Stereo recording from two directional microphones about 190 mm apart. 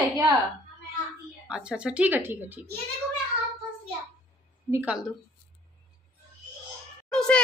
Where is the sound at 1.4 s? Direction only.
5° right (ahead or behind).